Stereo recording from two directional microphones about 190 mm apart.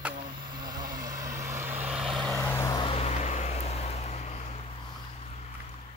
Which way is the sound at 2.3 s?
15° left (ahead or behind).